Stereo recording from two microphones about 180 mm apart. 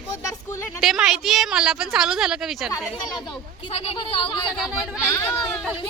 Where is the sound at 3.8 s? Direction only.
30° left (ahead or behind).